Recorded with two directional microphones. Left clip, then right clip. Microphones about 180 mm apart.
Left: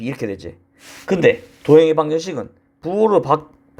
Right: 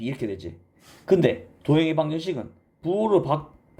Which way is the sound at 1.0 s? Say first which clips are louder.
Left 6 dB; 30° left (ahead or behind).